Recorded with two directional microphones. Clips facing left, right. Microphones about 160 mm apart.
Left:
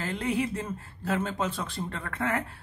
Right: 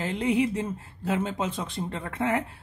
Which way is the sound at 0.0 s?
20° right (ahead or behind).